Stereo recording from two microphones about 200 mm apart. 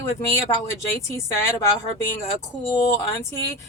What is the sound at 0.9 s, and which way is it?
Speech, 15° left (ahead or behind).